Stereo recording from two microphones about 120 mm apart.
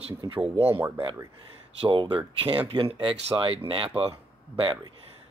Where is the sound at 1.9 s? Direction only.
45° right (ahead or behind).